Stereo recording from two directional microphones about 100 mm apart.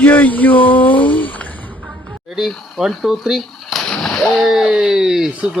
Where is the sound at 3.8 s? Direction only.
10° left (ahead or behind).